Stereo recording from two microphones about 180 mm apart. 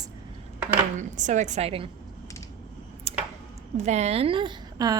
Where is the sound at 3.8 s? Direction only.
40° right (ahead or behind); by 5.0 s 20° right (ahead or behind).